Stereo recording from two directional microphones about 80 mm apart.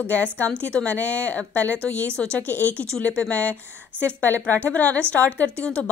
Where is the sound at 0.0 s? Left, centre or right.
Centre.